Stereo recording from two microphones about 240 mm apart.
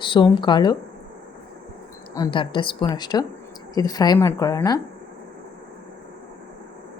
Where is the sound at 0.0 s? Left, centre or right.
Centre.